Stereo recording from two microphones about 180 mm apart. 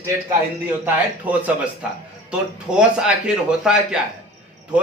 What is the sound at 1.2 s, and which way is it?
A man's voice, 10° right (ahead or behind).